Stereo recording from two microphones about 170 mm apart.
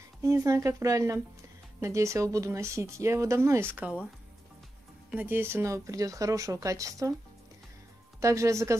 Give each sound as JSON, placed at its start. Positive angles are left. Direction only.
{"t": 0.2, "sound": "speech", "side_deg": -20}
{"t": 5.1, "sound": "speech", "side_deg": -10}
{"t": 8.2, "sound": "speech", "side_deg": -15}